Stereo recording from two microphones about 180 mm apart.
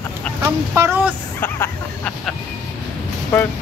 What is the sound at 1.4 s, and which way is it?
Vehicle, 10° left (ahead or behind).